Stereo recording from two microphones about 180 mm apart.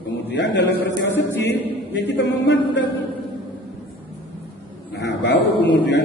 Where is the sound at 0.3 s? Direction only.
75° left (ahead or behind).